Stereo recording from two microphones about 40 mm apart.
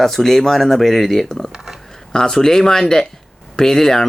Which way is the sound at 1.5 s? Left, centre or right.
Centre.